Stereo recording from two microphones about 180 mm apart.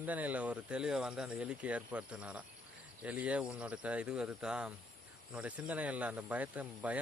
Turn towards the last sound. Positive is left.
turn(degrees=-5)  # may be behind; listen again after turning